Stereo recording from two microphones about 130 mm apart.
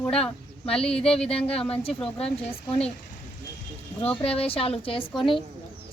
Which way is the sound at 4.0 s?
50° left (ahead or behind).